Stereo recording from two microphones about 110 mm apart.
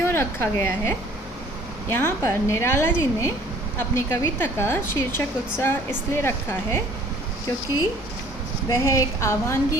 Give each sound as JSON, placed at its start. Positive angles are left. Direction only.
{"t": 0.0, "sound": "a woman's voice", "side_deg": 20}
{"t": 7.4, "sound": "a woman's voice", "side_deg": 35}